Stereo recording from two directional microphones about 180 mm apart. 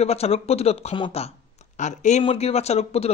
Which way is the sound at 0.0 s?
35° left (ahead or behind).